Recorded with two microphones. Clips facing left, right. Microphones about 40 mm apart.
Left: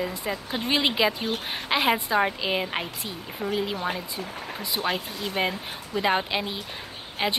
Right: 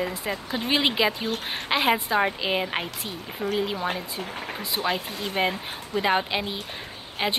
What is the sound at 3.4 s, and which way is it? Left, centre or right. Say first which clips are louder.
Speech: right 1 dB; right.